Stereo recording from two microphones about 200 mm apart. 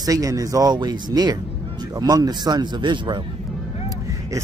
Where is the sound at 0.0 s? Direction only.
15° right (ahead or behind).